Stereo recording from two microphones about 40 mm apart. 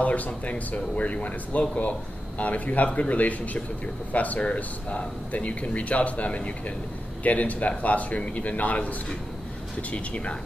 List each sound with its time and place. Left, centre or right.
0.0 s speech: left